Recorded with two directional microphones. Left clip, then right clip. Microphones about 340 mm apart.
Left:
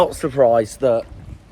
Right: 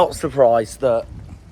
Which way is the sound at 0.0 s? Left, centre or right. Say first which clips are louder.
Even; centre.